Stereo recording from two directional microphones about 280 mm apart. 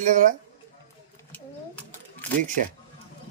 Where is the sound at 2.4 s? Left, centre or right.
Right.